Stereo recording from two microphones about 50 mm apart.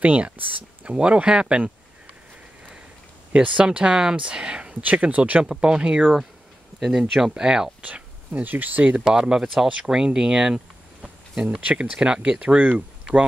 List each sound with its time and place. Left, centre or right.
0.0 s speech: right
0.8 s speech: right
3.3 s speech: centre
4.8 s speech: right
5.5 s speech: centre
7.8 s speech: right
12.7 s a sound: right